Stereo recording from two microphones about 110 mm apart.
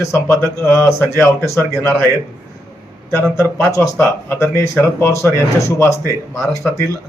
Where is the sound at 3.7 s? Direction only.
20° left (ahead or behind).